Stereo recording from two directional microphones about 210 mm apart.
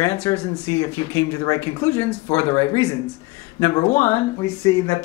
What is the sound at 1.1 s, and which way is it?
Speech, 15° left (ahead or behind).